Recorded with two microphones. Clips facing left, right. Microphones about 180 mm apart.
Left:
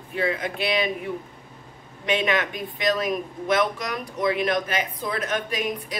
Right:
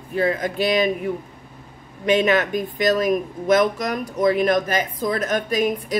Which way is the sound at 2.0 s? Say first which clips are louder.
Right 6 dB; 40° right (ahead or behind).